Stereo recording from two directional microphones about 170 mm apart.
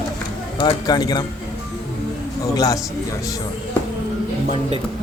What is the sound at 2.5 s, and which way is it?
Speech, 20° left (ahead or behind).